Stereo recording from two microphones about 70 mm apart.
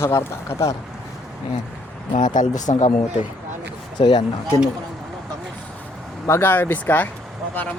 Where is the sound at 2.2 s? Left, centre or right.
Left.